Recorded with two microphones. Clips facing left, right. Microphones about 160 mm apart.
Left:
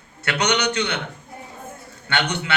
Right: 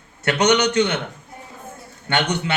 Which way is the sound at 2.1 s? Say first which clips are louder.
Right 3 dB; 45° right (ahead or behind).